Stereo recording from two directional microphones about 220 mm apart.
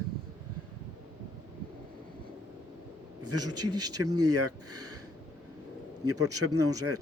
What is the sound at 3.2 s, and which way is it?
A man's voice, 90° right.